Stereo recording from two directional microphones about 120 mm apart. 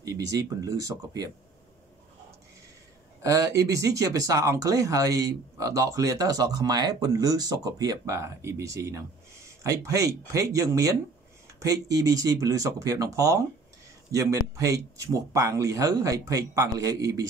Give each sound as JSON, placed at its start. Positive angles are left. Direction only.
{"t": 0.0, "sound": "speech", "side_deg": -30}
{"t": 3.2, "sound": "speech", "side_deg": -25}